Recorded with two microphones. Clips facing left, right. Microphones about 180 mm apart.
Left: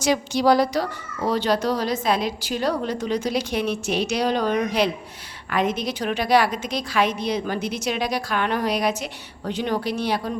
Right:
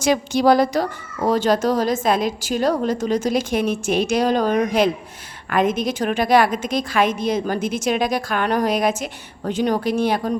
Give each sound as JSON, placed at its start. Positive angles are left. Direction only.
{"t": 0.0, "sound": "speech", "side_deg": -50}